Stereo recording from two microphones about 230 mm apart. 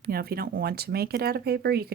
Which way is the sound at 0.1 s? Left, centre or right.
Right.